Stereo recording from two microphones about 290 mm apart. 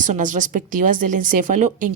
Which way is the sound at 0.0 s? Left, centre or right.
Right.